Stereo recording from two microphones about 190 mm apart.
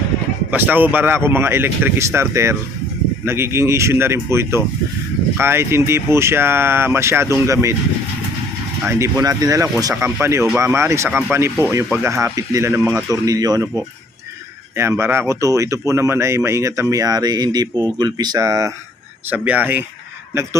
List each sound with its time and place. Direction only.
0.5 s speech: 10° right (ahead or behind)
8.9 s a man's voice: 15° right (ahead or behind)